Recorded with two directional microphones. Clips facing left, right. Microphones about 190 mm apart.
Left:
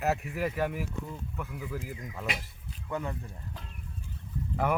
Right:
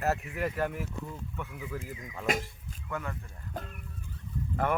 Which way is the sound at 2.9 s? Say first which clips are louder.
Left 3 dB; 20° left (ahead or behind).